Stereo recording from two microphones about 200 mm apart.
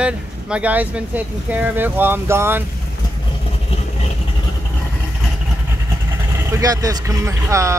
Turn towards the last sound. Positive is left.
turn(degrees=-15)  # may be behind; listen again after turning